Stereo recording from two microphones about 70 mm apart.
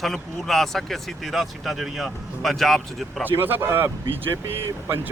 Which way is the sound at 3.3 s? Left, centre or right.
Right.